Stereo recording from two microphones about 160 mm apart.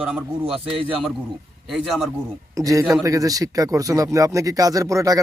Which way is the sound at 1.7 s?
Centre (ahead or behind).